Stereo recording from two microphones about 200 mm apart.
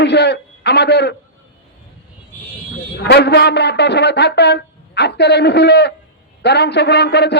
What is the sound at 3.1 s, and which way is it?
A man's voice, 55° left (ahead or behind).